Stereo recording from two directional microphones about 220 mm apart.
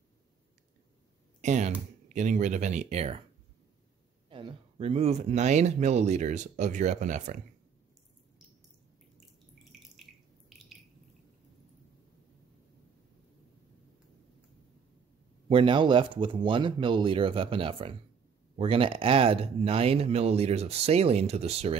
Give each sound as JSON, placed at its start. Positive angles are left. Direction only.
{"t": 1.4, "sound": "speech", "side_deg": -30}
{"t": 4.3, "sound": "speech", "side_deg": -20}
{"t": 15.4, "sound": "speech", "side_deg": -25}